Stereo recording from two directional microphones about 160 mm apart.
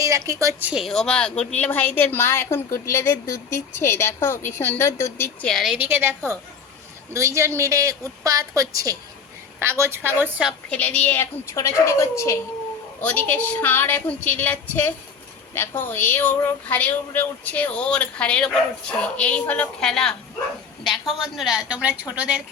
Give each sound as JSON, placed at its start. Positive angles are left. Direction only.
{"t": 0.0, "sound": "a woman's voice", "side_deg": -20}
{"t": 0.7, "sound": "a woman's voice", "side_deg": 0}
{"t": 5.5, "sound": "a woman's voice", "side_deg": 0}
{"t": 10.7, "sound": "a woman's voice", "side_deg": 10}